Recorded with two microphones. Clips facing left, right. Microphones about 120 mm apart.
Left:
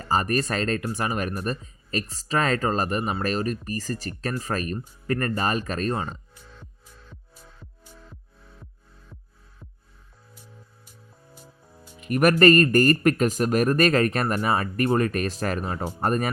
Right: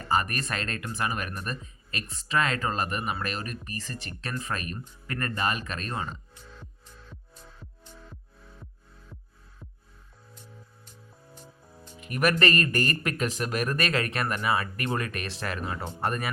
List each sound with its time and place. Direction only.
0.0 s speech: 35° left (ahead or behind)
7.1 s music: 5° left (ahead or behind)
11.3 s music: centre (ahead or behind)
12.0 s speech: 45° left (ahead or behind)